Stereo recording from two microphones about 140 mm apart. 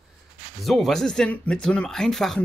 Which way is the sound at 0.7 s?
Centre (ahead or behind).